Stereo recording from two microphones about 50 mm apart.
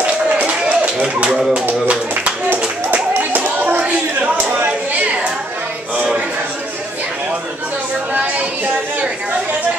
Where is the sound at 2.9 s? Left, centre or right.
Right.